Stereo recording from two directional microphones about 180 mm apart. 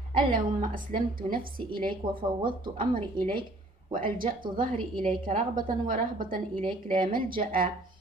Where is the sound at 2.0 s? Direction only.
30° right (ahead or behind).